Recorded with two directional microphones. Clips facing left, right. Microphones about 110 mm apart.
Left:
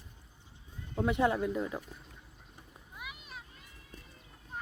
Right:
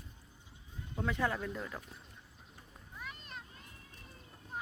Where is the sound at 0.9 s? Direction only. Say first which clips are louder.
Left 6 dB; 20° left (ahead or behind).